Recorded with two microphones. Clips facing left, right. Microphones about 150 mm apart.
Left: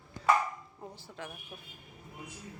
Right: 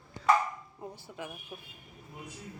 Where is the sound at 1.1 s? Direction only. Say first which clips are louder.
Right 2 dB; 10° right (ahead or behind).